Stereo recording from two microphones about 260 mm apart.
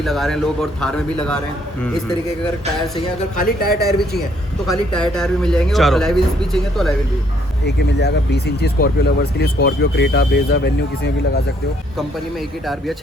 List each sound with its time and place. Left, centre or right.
0.0 s speech: centre
3.3 s speech: left
4.9 s speech: centre
7.6 s speech: left